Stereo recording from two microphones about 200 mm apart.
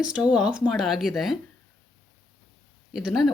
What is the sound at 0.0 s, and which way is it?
Speech, 5° right (ahead or behind).